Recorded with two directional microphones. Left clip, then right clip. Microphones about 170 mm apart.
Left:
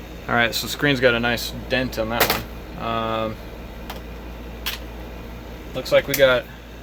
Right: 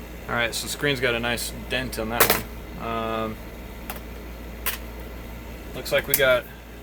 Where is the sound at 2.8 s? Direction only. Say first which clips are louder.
Left 4 dB; 55° left (ahead or behind).